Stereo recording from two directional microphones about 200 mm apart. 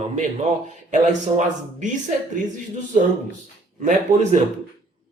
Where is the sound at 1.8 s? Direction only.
40° right (ahead or behind).